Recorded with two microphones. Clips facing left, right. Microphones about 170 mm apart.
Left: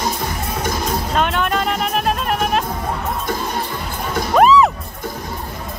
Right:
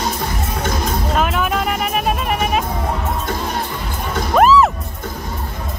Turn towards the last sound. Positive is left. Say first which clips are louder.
# even
turn(degrees=0)  # may be behind; listen again after turning